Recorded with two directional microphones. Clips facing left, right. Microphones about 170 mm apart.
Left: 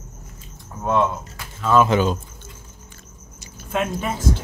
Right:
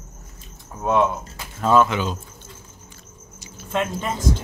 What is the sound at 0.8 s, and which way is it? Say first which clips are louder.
Speech: right 1 dB; 15° right (ahead or behind).